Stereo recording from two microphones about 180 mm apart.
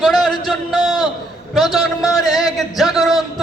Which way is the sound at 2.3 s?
Centre (ahead or behind).